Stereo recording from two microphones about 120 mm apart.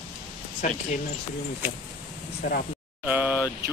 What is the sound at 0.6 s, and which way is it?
Speech, 75° left (ahead or behind).